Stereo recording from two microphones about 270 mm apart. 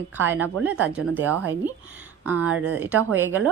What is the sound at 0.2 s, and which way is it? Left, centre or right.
Speech, centre.